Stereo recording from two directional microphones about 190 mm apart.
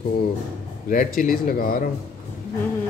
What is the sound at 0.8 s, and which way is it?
Speech, 45° left (ahead or behind).